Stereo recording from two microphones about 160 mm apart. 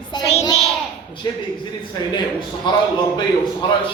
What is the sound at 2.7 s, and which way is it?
Speech, 30° left (ahead or behind).